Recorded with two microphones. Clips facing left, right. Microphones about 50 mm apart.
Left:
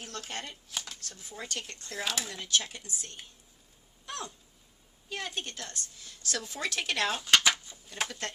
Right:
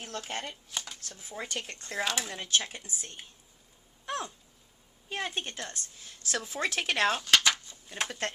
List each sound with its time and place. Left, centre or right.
0.0 s speech: centre
1.3 s a woman's voice: centre
2.0 s speech: centre
2.3 s speech: right
2.6 s a woman's voice: right
4.0 s a sound: right
5.1 s a woman's voice: right
7.2 s a sound: centre